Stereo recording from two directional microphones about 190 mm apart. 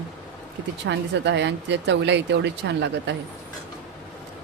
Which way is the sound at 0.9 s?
65° right (ahead or behind).